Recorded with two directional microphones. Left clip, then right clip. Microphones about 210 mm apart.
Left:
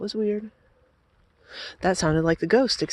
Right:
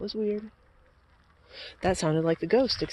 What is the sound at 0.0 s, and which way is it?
Speech, 50° left (ahead or behind).